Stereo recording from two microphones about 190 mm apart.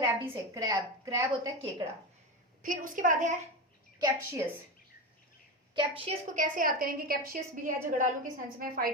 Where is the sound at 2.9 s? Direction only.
45° right (ahead or behind).